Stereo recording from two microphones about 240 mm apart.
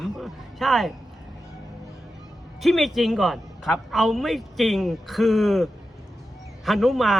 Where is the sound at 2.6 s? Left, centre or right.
Centre.